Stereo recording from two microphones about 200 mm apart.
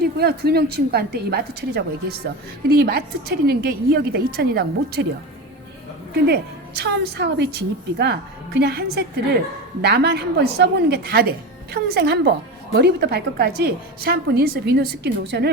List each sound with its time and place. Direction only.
0.0 s a woman's voice: 50° right (ahead or behind)
6.2 s a woman's voice: 55° right (ahead or behind)